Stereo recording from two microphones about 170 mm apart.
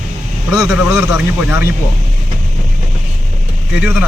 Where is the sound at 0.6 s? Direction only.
5° right (ahead or behind).